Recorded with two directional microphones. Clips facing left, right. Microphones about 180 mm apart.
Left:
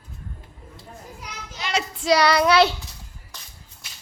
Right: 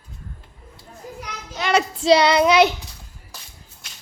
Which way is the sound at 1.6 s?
60° right (ahead or behind).